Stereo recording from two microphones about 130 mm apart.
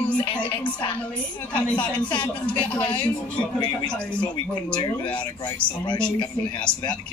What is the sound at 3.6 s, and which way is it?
Speech, 35° left (ahead or behind).